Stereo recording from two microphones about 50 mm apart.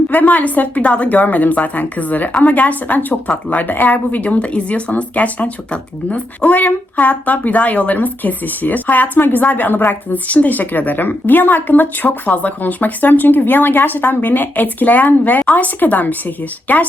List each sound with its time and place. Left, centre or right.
0.1 s speech: left